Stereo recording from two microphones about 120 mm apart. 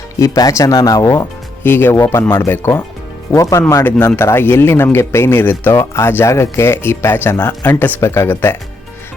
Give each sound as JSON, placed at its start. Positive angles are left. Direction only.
{"t": 0.2, "sound": "speech", "side_deg": 30}
{"t": 1.6, "sound": "speech", "side_deg": 20}